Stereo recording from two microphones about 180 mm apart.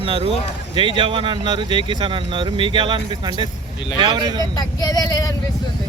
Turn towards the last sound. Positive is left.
turn(degrees=20)  # may be behind; listen again after turning